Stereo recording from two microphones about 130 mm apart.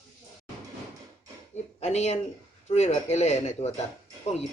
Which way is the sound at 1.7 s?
55° left (ahead or behind).